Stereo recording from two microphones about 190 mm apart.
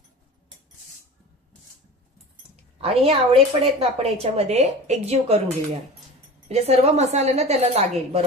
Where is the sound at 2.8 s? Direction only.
30° right (ahead or behind).